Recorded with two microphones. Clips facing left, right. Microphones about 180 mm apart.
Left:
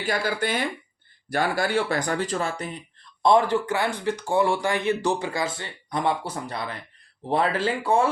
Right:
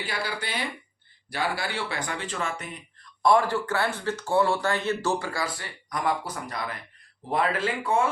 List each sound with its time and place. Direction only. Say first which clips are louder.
0.0 s speech: left 7 dB; 45° left (ahead or behind)
3.2 s speech: left 2 dB; 20° left (ahead or behind)